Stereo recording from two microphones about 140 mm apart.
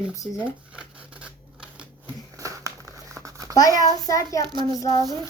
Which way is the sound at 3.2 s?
25° right (ahead or behind).